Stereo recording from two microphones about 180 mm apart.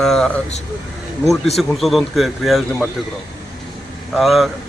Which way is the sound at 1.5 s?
Centre (ahead or behind).